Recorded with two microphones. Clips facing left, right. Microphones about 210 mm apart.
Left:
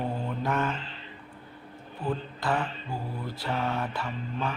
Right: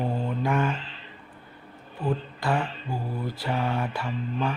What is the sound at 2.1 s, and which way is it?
Speech, 10° right (ahead or behind).